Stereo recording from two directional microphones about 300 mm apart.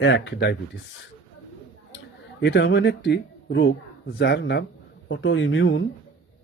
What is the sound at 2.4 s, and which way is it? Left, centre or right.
Speech, left.